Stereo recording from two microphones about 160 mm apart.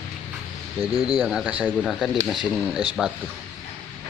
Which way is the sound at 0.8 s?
25° left (ahead or behind).